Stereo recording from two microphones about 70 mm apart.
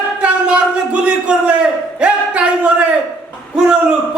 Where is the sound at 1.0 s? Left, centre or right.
Centre.